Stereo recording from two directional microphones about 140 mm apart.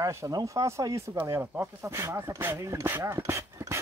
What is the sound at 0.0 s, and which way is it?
Speech, 20° right (ahead or behind).